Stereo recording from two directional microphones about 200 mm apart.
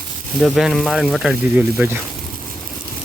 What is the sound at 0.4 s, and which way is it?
Speech, centre (ahead or behind).